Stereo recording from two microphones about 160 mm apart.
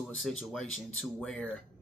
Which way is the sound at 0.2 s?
Centre (ahead or behind).